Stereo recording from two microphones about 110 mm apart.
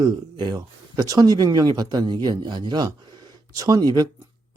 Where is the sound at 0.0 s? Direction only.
40° right (ahead or behind).